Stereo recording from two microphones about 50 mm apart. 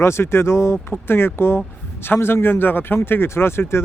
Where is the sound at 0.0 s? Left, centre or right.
Left.